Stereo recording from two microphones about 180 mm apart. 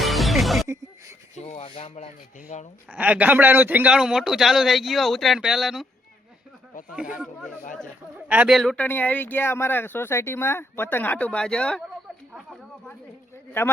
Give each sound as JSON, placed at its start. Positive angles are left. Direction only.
{"t": 0.0, "sound": "music", "side_deg": 0}
{"t": 1.4, "sound": "speech", "side_deg": 35}
{"t": 2.9, "sound": "a man's voice", "side_deg": -5}
{"t": 6.9, "sound": "a man's voice", "side_deg": -5}
{"t": 13.6, "sound": "speech", "side_deg": 10}